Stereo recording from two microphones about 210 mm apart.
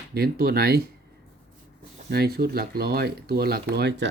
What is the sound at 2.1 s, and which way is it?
Speech, 50° right (ahead or behind).